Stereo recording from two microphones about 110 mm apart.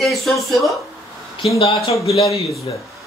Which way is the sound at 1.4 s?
55° left (ahead or behind).